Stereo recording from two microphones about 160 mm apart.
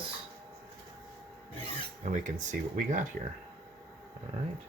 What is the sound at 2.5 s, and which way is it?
Speech, 50° right (ahead or behind).